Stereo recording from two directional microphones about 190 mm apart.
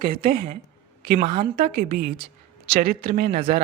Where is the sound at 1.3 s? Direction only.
30° right (ahead or behind).